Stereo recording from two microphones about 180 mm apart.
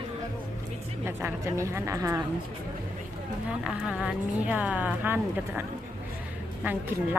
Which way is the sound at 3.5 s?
Centre (ahead or behind).